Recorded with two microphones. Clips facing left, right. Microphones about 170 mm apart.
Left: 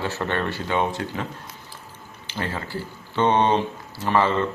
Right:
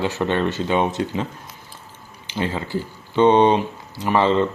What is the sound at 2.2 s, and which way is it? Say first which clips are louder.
Speech: right 5 dB; 15° right (ahead or behind).